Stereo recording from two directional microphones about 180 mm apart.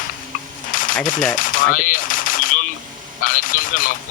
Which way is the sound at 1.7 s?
50° left (ahead or behind).